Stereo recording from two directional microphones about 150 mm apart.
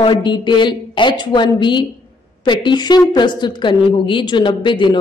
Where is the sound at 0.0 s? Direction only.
35° left (ahead or behind).